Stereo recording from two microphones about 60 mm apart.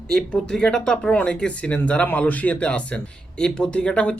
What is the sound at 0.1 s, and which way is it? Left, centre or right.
Speech, centre.